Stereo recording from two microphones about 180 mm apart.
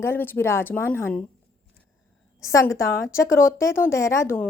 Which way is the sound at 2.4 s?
15° left (ahead or behind).